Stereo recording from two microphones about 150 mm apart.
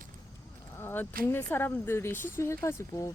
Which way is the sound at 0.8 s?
15° left (ahead or behind).